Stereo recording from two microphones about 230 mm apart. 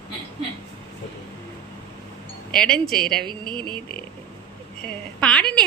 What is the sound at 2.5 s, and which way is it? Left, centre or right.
Speech, centre.